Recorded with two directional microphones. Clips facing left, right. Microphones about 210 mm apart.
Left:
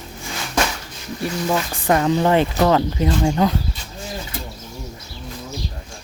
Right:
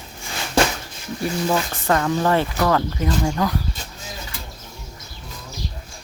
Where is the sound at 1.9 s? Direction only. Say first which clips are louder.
Left 3 dB; 20° left (ahead or behind).